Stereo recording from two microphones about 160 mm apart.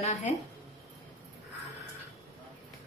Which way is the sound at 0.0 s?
45° left (ahead or behind).